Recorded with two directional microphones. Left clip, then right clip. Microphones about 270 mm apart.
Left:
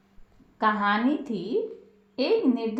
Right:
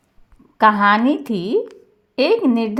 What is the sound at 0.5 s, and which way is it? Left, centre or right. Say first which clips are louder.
A woman's voice: right 11 dB; right.